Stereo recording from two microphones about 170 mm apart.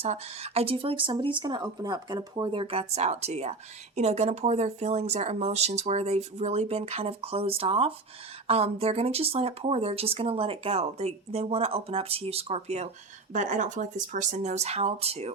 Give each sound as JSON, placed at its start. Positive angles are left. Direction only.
{"t": 0.0, "sound": "speech", "side_deg": -40}